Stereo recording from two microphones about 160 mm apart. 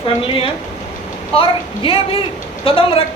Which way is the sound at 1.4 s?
35° left (ahead or behind).